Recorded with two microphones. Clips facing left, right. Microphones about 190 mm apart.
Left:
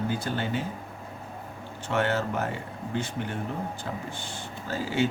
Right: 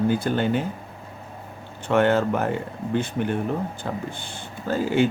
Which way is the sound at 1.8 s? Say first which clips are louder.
Right 7 dB; 55° right (ahead or behind).